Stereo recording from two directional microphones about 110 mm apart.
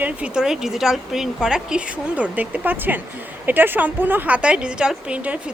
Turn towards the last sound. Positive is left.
turn(degrees=-10)  # may be behind; listen again after turning